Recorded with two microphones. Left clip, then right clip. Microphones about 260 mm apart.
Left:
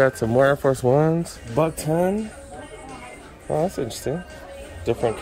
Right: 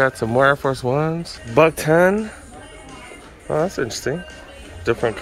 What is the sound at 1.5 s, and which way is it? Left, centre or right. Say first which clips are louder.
Speech: right 8 dB; right.